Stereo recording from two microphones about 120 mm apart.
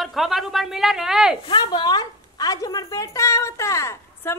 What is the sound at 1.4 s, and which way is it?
A woman's voice, 40° left (ahead or behind).